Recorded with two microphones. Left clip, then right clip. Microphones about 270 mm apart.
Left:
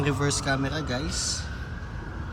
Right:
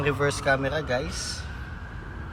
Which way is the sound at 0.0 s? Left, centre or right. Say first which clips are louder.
Right 3 dB; centre.